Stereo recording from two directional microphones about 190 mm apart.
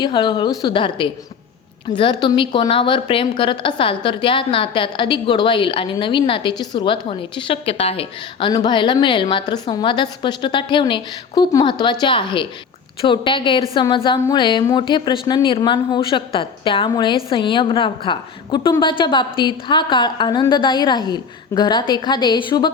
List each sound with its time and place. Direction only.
0.0 s a woman's voice: 25° left (ahead or behind)